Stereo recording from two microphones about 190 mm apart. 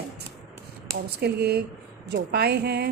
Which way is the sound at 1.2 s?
60° right (ahead or behind).